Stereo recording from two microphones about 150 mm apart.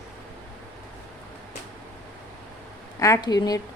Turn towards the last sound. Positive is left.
turn(degrees=25)  # may be behind; listen again after turning